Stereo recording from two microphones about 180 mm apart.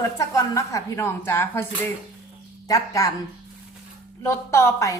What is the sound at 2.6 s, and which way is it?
Speech, 20° left (ahead or behind).